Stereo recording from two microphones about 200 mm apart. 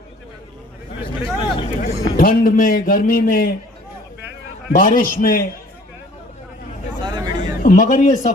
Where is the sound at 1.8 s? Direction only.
40° left (ahead or behind).